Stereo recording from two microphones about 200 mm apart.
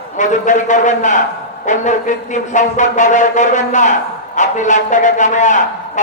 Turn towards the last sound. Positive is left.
turn(degrees=35)  # may be behind; listen again after turning